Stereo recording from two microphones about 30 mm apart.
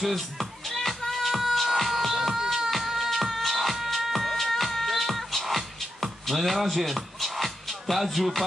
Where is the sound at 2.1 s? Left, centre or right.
Centre.